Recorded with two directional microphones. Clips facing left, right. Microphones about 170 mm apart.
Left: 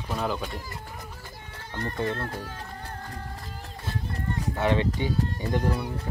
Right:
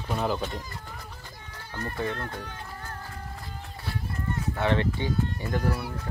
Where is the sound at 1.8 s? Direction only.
5° right (ahead or behind).